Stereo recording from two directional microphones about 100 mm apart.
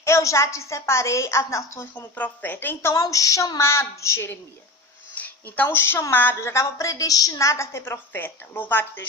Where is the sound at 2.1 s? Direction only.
15° left (ahead or behind).